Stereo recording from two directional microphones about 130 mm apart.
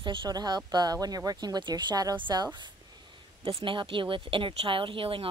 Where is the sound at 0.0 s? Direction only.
40° right (ahead or behind).